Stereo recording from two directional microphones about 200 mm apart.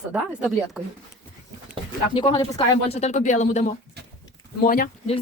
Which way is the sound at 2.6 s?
30° left (ahead or behind).